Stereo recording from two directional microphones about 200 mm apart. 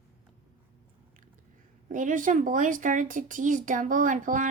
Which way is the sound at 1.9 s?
40° right (ahead or behind).